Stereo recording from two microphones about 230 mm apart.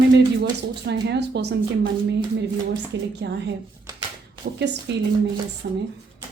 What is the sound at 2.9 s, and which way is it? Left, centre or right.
Speech, right.